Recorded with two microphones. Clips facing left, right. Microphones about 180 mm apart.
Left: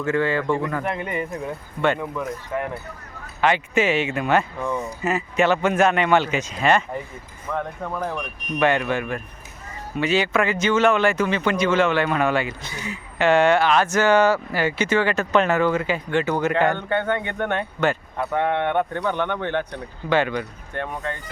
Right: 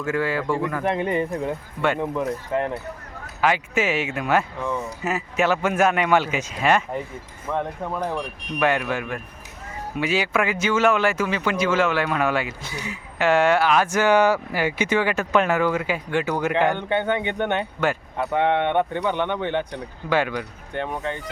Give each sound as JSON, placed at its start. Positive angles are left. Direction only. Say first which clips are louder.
{"t": 0.0, "sound": "speech", "louder": "left 2 dB", "side_deg": -5}
{"t": 0.9, "sound": "speech", "louder": "right 4 dB", "side_deg": -30}
{"t": 3.4, "sound": "speech", "louder": "left 2 dB", "side_deg": -5}
{"t": 17.7, "sound": "speech", "louder": "left 1 dB", "side_deg": -10}
{"t": 20.7, "sound": "speech", "louder": "right 1 dB", "side_deg": -20}